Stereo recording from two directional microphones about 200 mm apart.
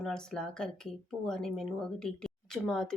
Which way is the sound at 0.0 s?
5° left (ahead or behind).